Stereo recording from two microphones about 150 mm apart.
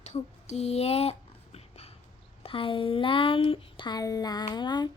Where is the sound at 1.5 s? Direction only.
45° left (ahead or behind).